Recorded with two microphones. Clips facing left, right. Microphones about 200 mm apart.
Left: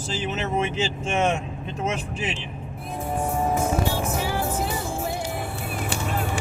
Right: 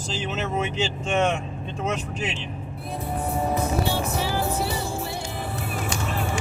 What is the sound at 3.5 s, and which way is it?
Music, 50° left (ahead or behind).